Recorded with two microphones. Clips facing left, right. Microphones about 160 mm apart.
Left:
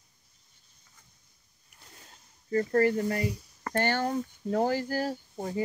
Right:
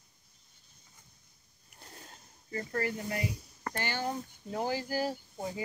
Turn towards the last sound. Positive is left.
turn(degrees=55)  # may be behind; listen again after turning